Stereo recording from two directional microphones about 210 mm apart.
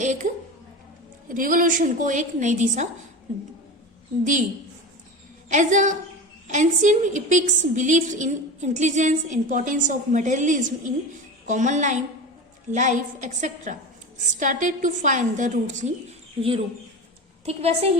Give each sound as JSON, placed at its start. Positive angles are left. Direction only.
{"t": 0.0, "sound": "a sound", "side_deg": -35}
{"t": 1.3, "sound": "a woman's voice", "side_deg": -40}
{"t": 4.2, "sound": "a woman's voice", "side_deg": -35}
{"t": 5.5, "sound": "a woman's voice", "side_deg": -35}
{"t": 17.4, "sound": "a woman's voice", "side_deg": -30}